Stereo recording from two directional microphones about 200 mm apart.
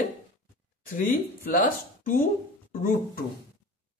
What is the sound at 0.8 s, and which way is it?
Speech, 45° left (ahead or behind).